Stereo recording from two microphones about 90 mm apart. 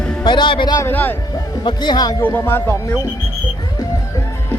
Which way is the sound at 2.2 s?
20° left (ahead or behind).